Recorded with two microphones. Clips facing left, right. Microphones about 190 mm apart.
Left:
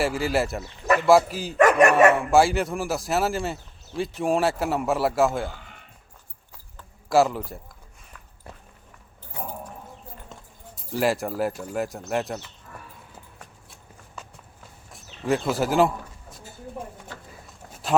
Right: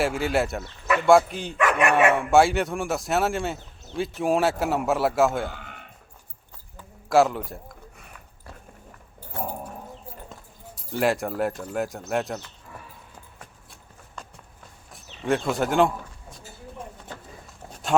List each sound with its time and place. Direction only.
0.0 s speech: centre (ahead or behind)
1.5 s speech: 40° left (ahead or behind)
2.1 s speech: centre (ahead or behind)
7.1 s speech: centre (ahead or behind)
10.8 s speech: centre (ahead or behind)
14.2 s walk: 5° left (ahead or behind)
14.9 s speech: centre (ahead or behind)